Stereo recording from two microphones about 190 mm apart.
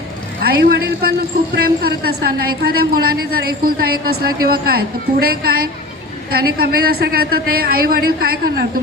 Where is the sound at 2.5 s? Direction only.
55° right (ahead or behind).